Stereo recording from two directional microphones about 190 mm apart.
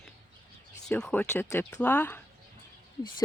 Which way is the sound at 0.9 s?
5° left (ahead or behind).